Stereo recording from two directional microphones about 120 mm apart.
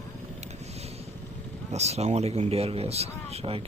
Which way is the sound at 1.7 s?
65° right (ahead or behind).